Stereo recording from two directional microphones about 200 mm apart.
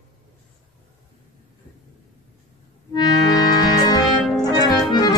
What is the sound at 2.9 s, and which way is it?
Music, 20° left (ahead or behind).